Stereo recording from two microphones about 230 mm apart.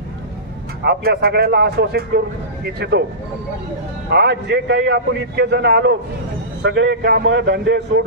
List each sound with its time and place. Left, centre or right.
0.8 s a man's voice: right
4.1 s a man's voice: right